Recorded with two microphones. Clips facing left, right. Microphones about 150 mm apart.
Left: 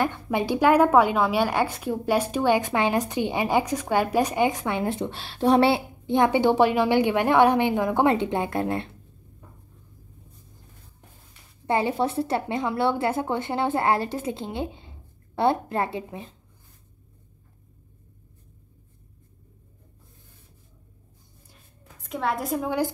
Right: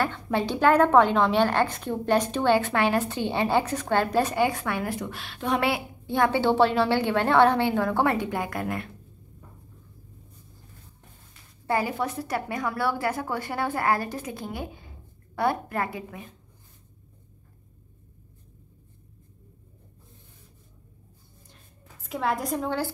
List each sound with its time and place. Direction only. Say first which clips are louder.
0.0 s a woman's voice: left 1 dB; 15° left (ahead or behind)
11.6 s a woman's voice: left 3 dB; 25° left (ahead or behind)
22.0 s a woman's voice: even; centre (ahead or behind)